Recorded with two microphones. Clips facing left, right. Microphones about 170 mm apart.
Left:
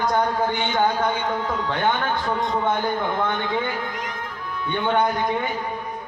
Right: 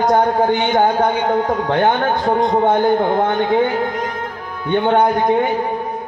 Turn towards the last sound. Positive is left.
turn(degrees=-55)  # may be behind; listen again after turning